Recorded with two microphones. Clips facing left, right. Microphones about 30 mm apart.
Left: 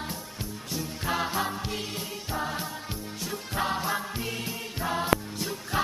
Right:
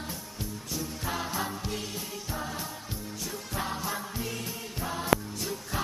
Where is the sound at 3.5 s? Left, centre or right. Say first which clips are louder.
Left 5 dB; left.